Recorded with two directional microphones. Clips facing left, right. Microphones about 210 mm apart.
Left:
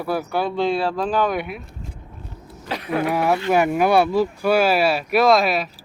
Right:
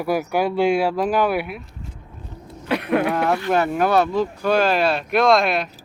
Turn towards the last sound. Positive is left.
turn(degrees=0)  # may be behind; listen again after turning